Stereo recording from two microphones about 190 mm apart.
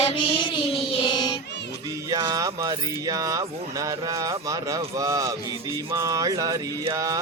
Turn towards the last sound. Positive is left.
turn(degrees=-20)  # may be behind; listen again after turning